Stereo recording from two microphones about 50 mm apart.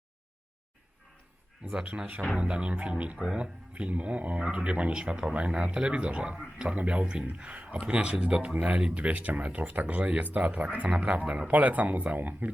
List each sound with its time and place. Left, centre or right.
1.7 s speech: right